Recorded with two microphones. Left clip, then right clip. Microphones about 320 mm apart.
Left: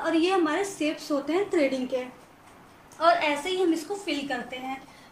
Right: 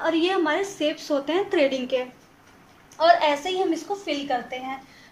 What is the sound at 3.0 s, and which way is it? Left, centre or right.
A woman's voice, centre.